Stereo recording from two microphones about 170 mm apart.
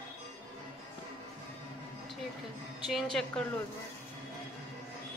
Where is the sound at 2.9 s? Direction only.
Centre (ahead or behind).